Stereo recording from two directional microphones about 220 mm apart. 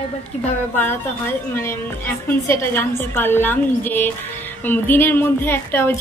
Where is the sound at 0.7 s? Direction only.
10° left (ahead or behind).